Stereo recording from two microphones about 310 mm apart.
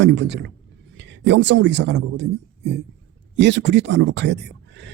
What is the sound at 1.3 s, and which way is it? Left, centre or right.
Speech, right.